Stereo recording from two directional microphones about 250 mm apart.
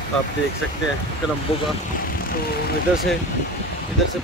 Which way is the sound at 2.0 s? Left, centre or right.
Left.